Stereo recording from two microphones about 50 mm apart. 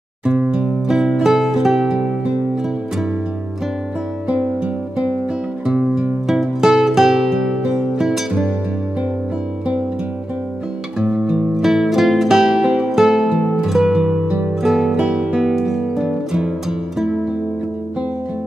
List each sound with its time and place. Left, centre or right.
0.2 s music: right
0.8 s music: centre
6.2 s music: centre
11.0 s music: centre
11.5 s music: centre